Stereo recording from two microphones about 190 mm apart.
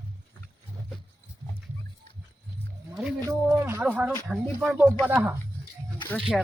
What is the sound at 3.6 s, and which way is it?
Speech, 10° right (ahead or behind).